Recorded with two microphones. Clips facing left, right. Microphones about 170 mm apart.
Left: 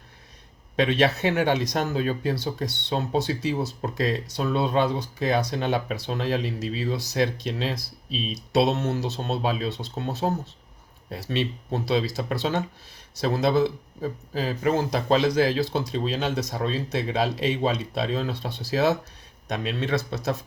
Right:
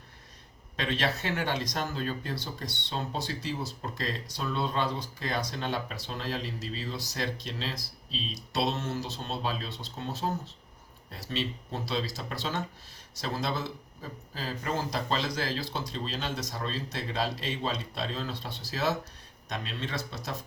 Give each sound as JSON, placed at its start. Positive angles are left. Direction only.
{"t": 0.8, "sound": "speech", "side_deg": 60}